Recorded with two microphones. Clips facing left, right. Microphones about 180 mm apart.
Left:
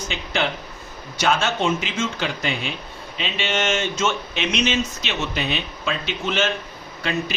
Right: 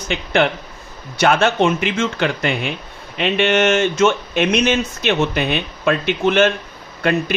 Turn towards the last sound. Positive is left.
turn(degrees=-55)  # may be behind; listen again after turning